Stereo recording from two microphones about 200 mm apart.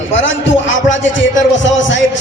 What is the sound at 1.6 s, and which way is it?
Speech, 65° left (ahead or behind).